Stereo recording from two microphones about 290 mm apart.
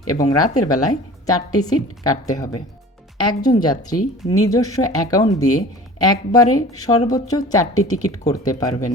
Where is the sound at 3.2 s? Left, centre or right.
Centre.